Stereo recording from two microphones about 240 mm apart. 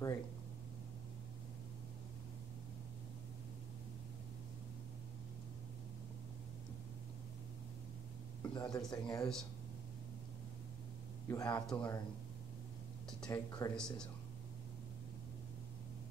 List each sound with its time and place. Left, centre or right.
8.4 s speech: centre
11.2 s speech: centre
13.2 s speech: centre